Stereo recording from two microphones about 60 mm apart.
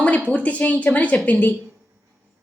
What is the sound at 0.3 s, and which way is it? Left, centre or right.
A woman's voice, left.